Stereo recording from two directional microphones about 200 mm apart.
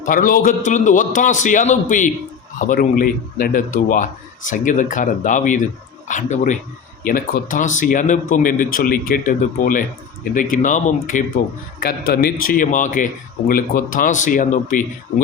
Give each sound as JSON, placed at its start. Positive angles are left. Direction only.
{"t": 0.0, "sound": "speech", "side_deg": 40}